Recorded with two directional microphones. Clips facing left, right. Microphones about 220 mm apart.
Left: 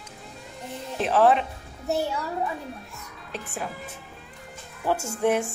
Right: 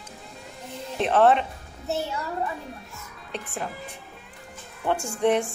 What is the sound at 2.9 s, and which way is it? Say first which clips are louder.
Speech: right 1 dB; centre (ahead or behind).